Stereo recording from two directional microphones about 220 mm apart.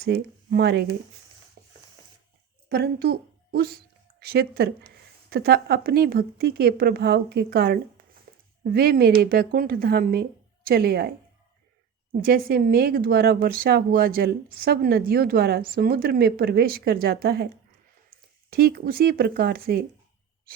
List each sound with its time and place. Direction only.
0.0 s speech: 45° right (ahead or behind)
1.6 s a sound: 45° right (ahead or behind)
2.6 s a woman's voice: 45° right (ahead or behind)
8.3 s a sound: 40° right (ahead or behind)
8.6 s speech: 45° right (ahead or behind)
12.2 s speech: 45° right (ahead or behind)
18.5 s speech: 45° right (ahead or behind)